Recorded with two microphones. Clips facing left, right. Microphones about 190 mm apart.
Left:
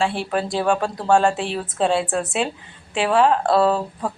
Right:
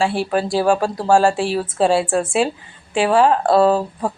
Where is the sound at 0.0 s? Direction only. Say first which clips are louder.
Right 3 dB; 5° right (ahead or behind).